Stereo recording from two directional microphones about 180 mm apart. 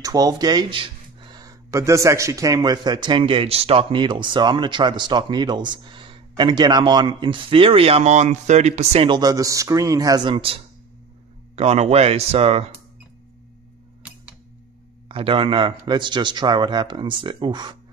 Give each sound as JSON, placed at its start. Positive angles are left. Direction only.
{"t": 0.0, "sound": "speech", "side_deg": -20}
{"t": 15.0, "sound": "speech", "side_deg": -30}